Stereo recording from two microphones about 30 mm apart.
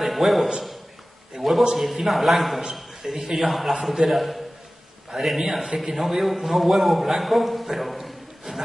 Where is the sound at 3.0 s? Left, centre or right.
Right.